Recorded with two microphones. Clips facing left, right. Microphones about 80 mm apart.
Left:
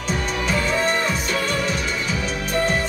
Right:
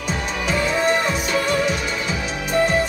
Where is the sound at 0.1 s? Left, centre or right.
Centre.